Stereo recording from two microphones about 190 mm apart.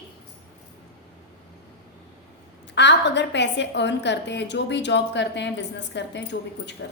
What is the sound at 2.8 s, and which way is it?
A woman's voice, 65° left (ahead or behind).